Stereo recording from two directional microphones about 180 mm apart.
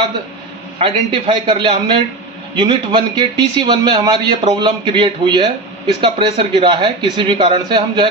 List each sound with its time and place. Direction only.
0.7 s a man's voice: 30° right (ahead or behind)